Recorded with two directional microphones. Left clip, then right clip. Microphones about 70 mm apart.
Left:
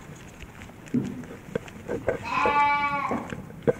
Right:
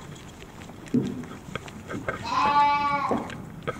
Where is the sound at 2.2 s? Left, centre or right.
Centre.